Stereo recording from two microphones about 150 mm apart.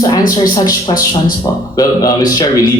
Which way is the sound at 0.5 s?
25° left (ahead or behind).